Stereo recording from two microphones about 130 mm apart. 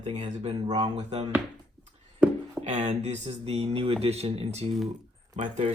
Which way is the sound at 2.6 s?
60° right (ahead or behind).